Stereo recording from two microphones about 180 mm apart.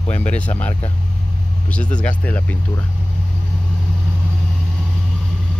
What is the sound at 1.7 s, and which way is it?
Speech, 5° left (ahead or behind).